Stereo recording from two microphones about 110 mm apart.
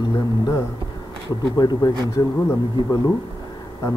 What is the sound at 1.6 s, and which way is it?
Speech, 40° left (ahead or behind).